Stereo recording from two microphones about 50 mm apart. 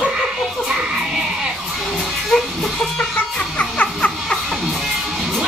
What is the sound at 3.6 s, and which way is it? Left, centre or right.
Music, left.